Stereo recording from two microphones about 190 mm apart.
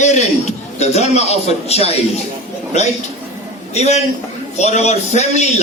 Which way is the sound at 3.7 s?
35° left (ahead or behind).